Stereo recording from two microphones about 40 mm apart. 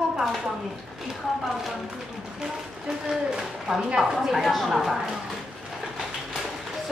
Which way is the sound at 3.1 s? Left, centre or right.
Centre.